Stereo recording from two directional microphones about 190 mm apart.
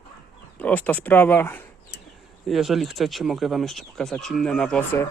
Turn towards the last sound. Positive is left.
turn(degrees=5)  # may be behind; listen again after turning